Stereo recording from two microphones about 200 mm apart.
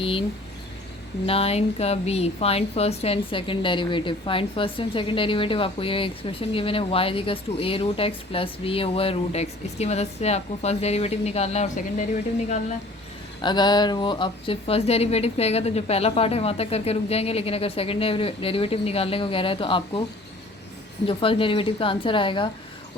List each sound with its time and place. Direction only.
0.0 s speech: 25° left (ahead or behind)
1.3 s speech: 30° left (ahead or behind)
13.4 s speech: 20° left (ahead or behind)
21.1 s speech: 25° left (ahead or behind)